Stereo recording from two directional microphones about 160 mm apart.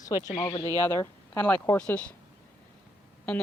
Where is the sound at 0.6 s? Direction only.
25° right (ahead or behind).